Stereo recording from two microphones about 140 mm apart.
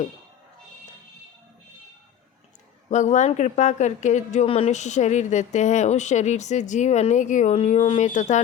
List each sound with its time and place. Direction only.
2.9 s a woman's voice: 60° left (ahead or behind)
7.5 s speech: 45° left (ahead or behind)
8.0 s a woman's voice: 60° left (ahead or behind)